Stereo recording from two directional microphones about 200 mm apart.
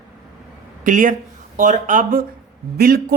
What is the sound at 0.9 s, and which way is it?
A woman's voice, 40° right (ahead or behind).